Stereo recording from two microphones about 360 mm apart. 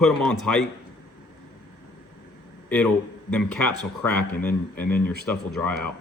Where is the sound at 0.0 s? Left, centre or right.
Centre.